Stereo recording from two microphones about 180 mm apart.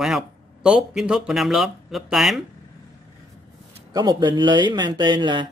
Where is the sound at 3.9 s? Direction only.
25° right (ahead or behind).